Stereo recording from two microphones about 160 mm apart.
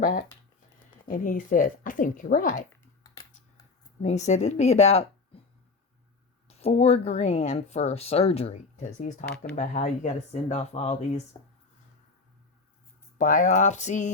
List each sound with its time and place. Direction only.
1.0 s speech: 55° left (ahead or behind)
4.0 s speech: 45° left (ahead or behind)
6.5 s speech: 40° left (ahead or behind)
13.1 s speech: 55° left (ahead or behind)